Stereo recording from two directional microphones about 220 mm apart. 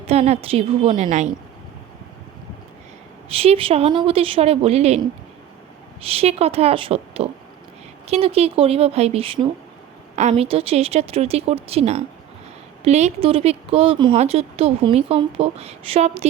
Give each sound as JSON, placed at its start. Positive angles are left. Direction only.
{"t": 0.1, "sound": "speech", "side_deg": -30}
{"t": 3.2, "sound": "speech", "side_deg": -25}
{"t": 6.0, "sound": "speech", "side_deg": -25}